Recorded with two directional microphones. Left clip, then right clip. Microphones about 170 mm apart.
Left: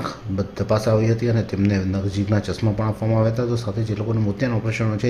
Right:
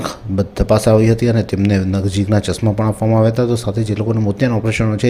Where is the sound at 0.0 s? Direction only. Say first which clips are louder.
Right 6 dB; 30° right (ahead or behind).